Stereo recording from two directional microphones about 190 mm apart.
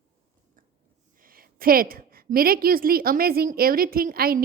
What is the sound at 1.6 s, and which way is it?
A woman's voice, 50° right (ahead or behind).